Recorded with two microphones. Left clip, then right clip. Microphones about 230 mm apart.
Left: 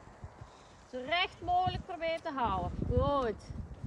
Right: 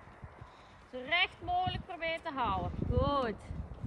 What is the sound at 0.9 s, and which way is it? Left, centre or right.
Speech, left.